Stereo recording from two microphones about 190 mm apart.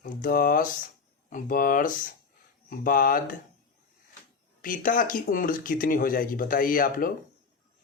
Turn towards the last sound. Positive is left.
turn(degrees=50)  # may be behind; listen again after turning